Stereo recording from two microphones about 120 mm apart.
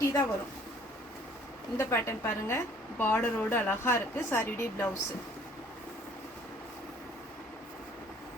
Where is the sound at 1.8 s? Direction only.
20° left (ahead or behind).